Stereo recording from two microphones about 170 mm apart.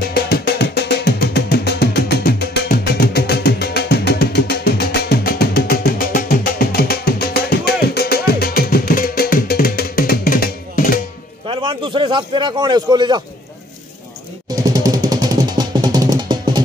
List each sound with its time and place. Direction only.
0.0 s music: 65° left (ahead or behind)
11.4 s a sound: 30° right (ahead or behind)
14.5 s music: 20° right (ahead or behind)